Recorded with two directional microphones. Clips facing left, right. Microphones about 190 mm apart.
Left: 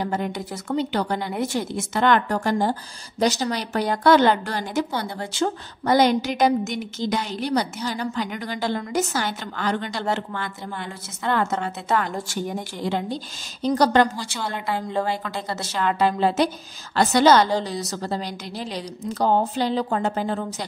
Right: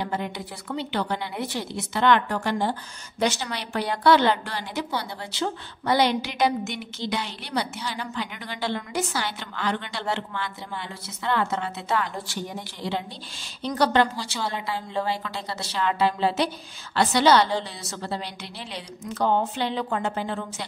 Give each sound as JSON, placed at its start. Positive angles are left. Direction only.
{"t": 0.0, "sound": "a woman's voice", "side_deg": 45}